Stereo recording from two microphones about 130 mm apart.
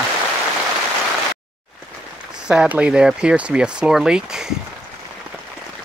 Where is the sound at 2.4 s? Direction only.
10° right (ahead or behind).